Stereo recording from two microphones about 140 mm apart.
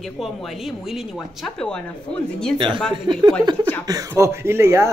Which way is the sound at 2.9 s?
35° right (ahead or behind).